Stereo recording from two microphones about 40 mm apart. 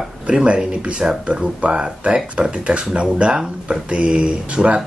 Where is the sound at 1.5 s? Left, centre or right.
Right.